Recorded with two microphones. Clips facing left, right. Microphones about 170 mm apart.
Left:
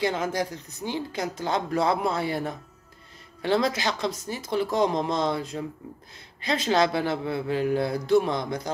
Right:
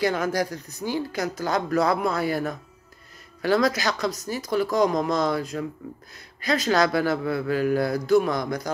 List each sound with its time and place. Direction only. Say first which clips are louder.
0.0 s a woman's voice: right 2 dB; 25° left (ahead or behind)